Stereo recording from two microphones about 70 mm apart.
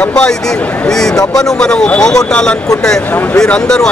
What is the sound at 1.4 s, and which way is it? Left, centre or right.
Speech, centre.